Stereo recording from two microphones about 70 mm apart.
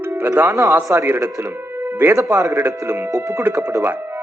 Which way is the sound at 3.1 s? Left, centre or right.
Right.